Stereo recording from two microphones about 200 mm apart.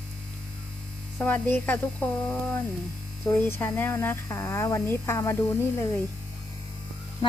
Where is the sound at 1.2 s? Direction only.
10° left (ahead or behind).